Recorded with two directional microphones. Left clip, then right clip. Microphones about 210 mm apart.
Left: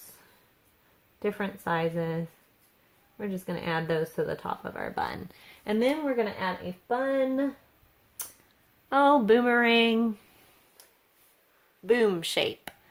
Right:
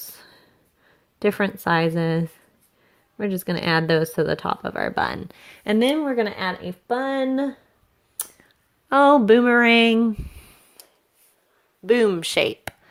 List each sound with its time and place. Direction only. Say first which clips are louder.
1.2 s speech: right 10 dB; 40° right (ahead or behind)
8.9 s speech: right 7 dB; 30° right (ahead or behind)
11.9 s speech: right 6 dB; 25° right (ahead or behind)